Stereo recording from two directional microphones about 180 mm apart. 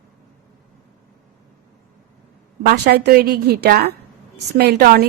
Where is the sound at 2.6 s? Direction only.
65° right (ahead or behind).